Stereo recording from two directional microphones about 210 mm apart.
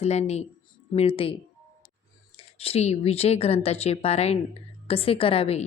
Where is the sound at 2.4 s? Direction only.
25° left (ahead or behind).